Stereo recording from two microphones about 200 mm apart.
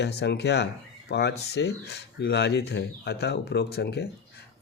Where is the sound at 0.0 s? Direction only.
55° left (ahead or behind).